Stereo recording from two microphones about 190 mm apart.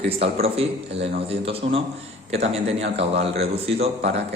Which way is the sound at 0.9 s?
70° right (ahead or behind).